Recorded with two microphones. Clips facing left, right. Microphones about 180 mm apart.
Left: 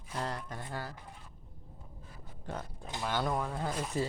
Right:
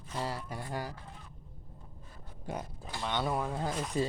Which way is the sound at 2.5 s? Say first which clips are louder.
Right 2 dB; 10° right (ahead or behind).